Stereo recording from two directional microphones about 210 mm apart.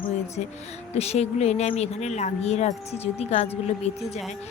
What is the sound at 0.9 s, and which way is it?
Speech, 30° left (ahead or behind).